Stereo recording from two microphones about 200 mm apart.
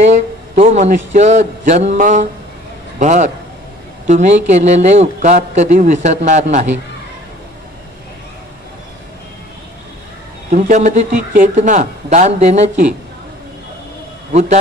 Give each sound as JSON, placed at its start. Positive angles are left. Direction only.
{"t": 0.0, "sound": "a man's voice", "side_deg": -35}
{"t": 10.5, "sound": "speech", "side_deg": -35}